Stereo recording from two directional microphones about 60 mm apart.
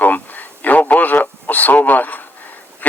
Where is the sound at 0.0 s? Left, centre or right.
Left.